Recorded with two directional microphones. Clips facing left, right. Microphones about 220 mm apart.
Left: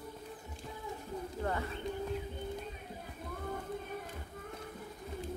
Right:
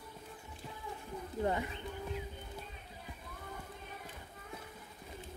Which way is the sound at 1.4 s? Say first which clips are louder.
Right 3 dB; 15° right (ahead or behind).